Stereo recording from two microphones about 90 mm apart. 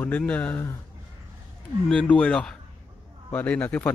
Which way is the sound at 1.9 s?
10° left (ahead or behind).